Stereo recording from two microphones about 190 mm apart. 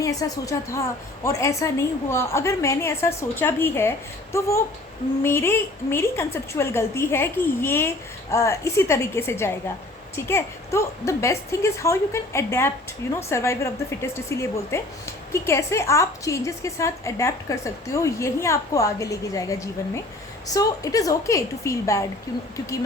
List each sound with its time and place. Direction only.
0.0 s a woman's voice: 15° left (ahead or behind)